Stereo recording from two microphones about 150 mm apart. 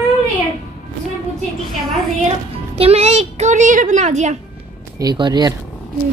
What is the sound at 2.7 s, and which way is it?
A child's voice, 40° right (ahead or behind).